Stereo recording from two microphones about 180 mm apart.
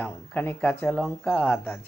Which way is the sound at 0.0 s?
10° left (ahead or behind).